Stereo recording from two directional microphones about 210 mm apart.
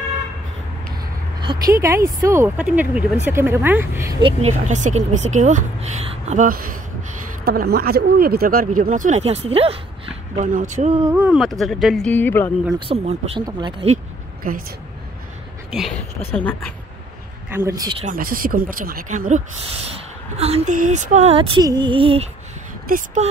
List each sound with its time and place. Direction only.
1.4 s speech: 20° right (ahead or behind)
4.2 s speech: 25° right (ahead or behind)
4.6 s speech: 35° right (ahead or behind)
11.1 s speech: 5° right (ahead or behind); by 12.5 s 10° left (ahead or behind)
12.7 s speech: 25° right (ahead or behind)
16.3 s speech: 10° left (ahead or behind)
17.5 s speech: 10° right (ahead or behind)
18.0 s speech: 40° right (ahead or behind); by 22.2 s 25° right (ahead or behind)
22.8 s speech: 40° right (ahead or behind)